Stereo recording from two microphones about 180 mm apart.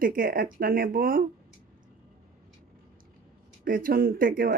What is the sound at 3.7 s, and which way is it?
Speech, 50° right (ahead or behind).